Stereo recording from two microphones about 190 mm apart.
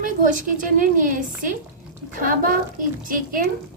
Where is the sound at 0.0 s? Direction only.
45° right (ahead or behind).